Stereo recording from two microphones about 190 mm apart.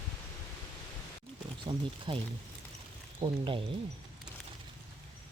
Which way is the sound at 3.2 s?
25° right (ahead or behind).